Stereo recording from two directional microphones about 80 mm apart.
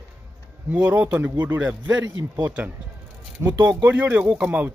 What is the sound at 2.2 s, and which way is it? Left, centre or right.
Speech, right.